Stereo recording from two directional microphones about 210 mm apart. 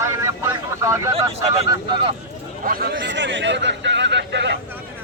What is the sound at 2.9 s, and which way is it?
Speech, 60° right (ahead or behind).